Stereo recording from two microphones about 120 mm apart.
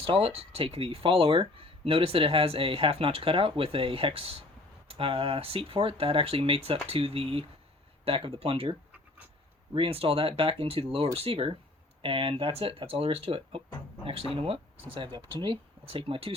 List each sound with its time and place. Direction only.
0.0 s speech: 50° right (ahead or behind)
9.7 s speech: 50° right (ahead or behind)